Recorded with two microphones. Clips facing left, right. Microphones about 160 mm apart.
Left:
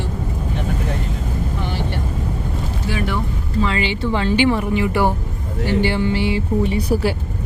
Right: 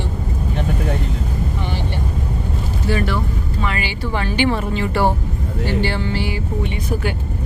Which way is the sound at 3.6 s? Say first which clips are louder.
Left 5 dB; 25° left (ahead or behind).